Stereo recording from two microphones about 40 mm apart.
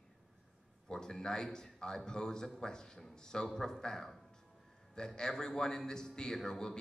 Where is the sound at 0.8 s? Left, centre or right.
Centre.